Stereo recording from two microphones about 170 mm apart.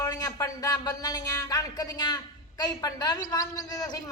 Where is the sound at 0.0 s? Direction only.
20° left (ahead or behind).